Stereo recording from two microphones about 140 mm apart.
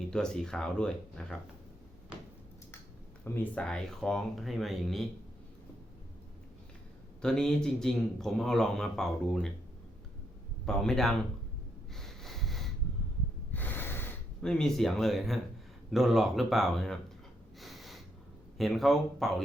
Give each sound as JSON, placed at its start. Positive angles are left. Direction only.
{"t": 0.1, "sound": "speech", "side_deg": 5}
{"t": 3.2, "sound": "speech", "side_deg": 10}
{"t": 7.2, "sound": "speech", "side_deg": 5}
{"t": 10.7, "sound": "speech", "side_deg": 5}
{"t": 11.9, "sound": "sniff", "side_deg": 0}
{"t": 13.5, "sound": "snort", "side_deg": 15}
{"t": 14.4, "sound": "speech", "side_deg": 5}
{"t": 17.6, "sound": "gasp", "side_deg": 0}
{"t": 18.5, "sound": "speech", "side_deg": 0}